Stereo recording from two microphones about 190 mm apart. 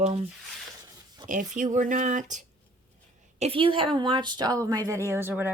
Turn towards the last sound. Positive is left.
turn(degrees=-10)  # may be behind; listen again after turning